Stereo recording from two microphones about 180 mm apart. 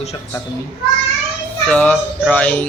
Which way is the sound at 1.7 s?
10° left (ahead or behind).